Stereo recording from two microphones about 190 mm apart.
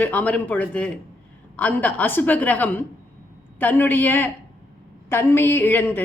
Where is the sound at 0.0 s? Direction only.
10° left (ahead or behind).